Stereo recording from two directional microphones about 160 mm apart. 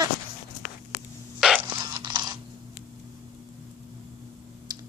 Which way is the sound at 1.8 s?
25° right (ahead or behind).